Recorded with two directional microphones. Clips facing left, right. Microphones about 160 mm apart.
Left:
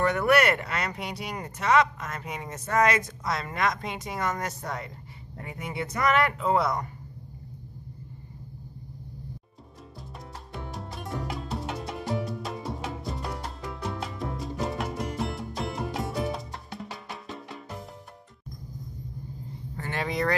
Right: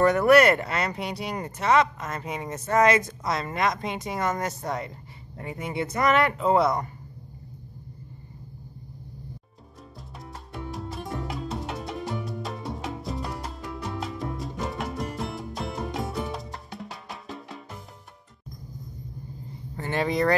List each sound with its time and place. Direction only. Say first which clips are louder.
0.0 s speech: right 5 dB; 40° right (ahead or behind)
9.9 s music: even; centre (ahead or behind)
19.9 s speech: right 5 dB; 30° right (ahead or behind)